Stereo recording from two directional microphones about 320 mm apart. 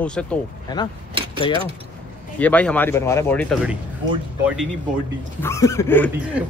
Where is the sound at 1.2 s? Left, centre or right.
Centre.